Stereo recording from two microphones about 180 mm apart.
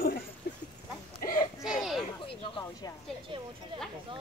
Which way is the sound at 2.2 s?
30° left (ahead or behind).